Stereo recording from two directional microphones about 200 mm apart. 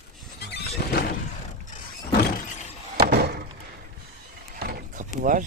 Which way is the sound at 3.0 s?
55° right (ahead or behind).